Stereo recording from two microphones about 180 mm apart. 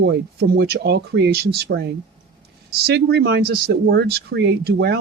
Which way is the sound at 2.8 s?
60° right (ahead or behind).